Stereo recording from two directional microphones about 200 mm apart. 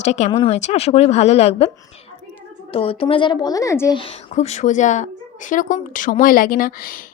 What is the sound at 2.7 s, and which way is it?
Speech, 30° left (ahead or behind).